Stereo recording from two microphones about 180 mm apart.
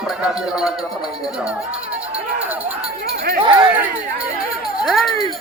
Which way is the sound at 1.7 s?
5° right (ahead or behind).